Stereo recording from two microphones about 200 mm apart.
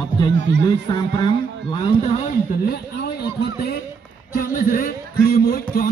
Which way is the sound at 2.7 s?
55° left (ahead or behind).